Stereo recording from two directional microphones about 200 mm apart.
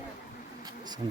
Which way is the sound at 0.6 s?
20° right (ahead or behind).